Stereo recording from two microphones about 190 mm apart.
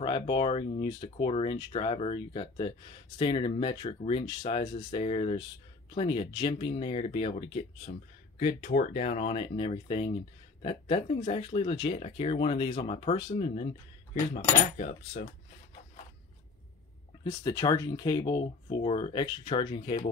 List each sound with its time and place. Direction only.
0.0 s speech: 25° left (ahead or behind)
14.3 s speech: 40° left (ahead or behind)
17.2 s speech: 20° left (ahead or behind)